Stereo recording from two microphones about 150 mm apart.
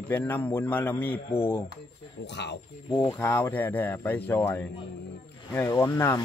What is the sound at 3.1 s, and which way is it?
Speech, 15° left (ahead or behind).